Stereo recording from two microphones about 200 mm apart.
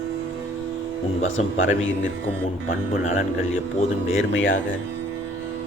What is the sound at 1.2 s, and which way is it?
Speech, 80° left.